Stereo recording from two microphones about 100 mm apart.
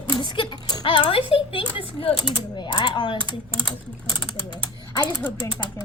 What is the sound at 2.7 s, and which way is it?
Speech, 55° left (ahead or behind).